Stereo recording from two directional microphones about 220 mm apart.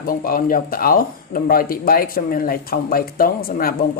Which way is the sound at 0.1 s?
40° left (ahead or behind).